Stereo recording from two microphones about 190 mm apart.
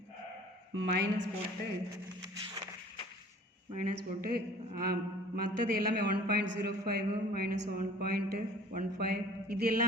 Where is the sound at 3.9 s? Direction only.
55° right (ahead or behind).